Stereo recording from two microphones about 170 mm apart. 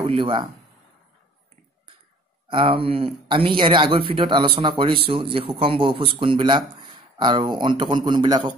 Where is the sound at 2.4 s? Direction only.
30° right (ahead or behind).